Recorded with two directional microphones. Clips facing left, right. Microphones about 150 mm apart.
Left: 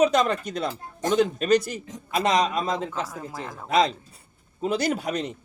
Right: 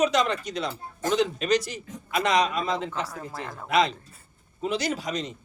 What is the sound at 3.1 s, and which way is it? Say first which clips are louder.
Speech: left 1 dB; 15° left (ahead or behind).